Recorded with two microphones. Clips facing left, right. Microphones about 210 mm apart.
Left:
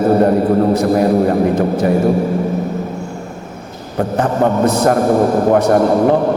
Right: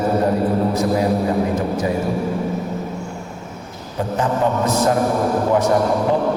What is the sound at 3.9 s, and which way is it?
A man's voice, 60° left (ahead or behind).